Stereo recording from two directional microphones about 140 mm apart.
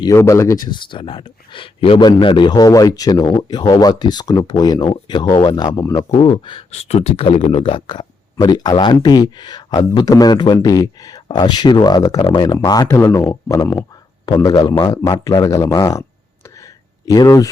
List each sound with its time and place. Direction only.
0.0 s speech: 20° left (ahead or behind)
6.1 s speech: 40° left (ahead or behind)
17.1 s speech: 25° left (ahead or behind)